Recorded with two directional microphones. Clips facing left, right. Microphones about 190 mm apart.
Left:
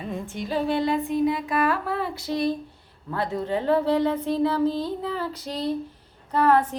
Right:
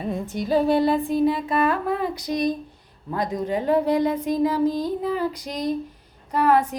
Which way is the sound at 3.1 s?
15° right (ahead or behind).